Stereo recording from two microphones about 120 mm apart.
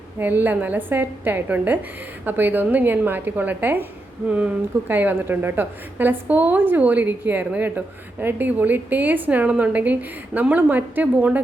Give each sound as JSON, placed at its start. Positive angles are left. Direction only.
{"t": 0.2, "sound": "a woman's voice", "side_deg": -15}